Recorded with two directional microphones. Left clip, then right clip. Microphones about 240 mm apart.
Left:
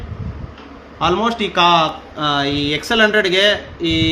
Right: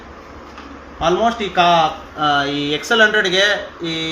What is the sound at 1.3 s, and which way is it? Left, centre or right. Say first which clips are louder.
Speech: left 2 dB; left.